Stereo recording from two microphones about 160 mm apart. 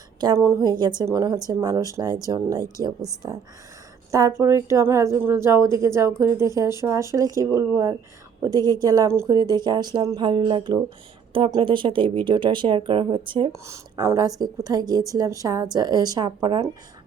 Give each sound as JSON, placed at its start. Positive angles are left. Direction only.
{"t": 0.2, "sound": "a woman's voice", "side_deg": -20}
{"t": 13.5, "sound": "a woman's voice", "side_deg": -20}